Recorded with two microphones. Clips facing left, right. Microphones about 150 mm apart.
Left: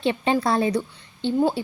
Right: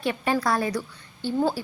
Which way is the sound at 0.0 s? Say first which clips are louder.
Left 3 dB; 25° left (ahead or behind).